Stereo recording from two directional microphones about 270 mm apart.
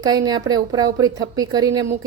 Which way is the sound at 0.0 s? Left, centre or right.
Centre.